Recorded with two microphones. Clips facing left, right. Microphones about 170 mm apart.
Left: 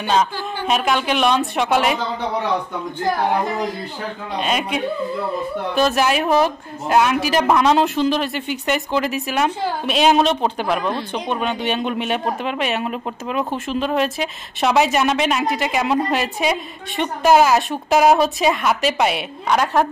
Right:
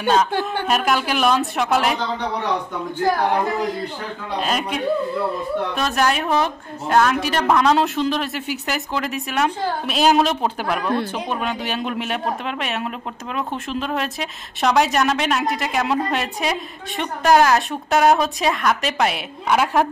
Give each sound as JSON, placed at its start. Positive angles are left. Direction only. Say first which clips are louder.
{"t": 0.0, "sound": "speech", "louder": "right 1 dB", "side_deg": 0}
{"t": 0.3, "sound": "speech", "louder": "right 4 dB", "side_deg": -60}
{"t": 0.7, "sound": "speech", "louder": "left 4 dB", "side_deg": 0}
{"t": 4.4, "sound": "speech", "louder": "left 2 dB", "side_deg": 0}